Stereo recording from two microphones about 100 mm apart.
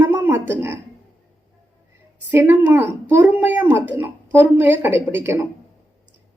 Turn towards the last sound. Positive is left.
turn(degrees=-20)  # may be behind; listen again after turning